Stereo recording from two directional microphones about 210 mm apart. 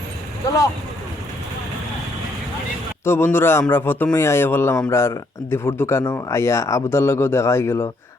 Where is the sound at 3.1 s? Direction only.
10° left (ahead or behind).